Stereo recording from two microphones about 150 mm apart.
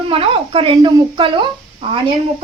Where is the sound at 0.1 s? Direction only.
35° right (ahead or behind).